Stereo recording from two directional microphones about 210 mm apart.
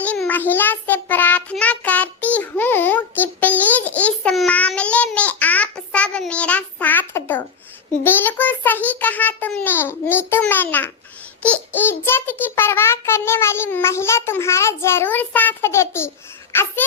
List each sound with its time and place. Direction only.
0.0 s child singing: 5° left (ahead or behind)
8.0 s a child's voice: 10° left (ahead or behind)